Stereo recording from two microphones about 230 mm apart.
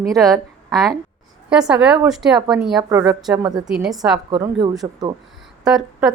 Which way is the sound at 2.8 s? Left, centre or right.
Centre.